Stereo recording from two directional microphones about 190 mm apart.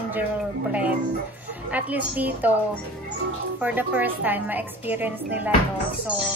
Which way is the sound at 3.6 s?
10° right (ahead or behind).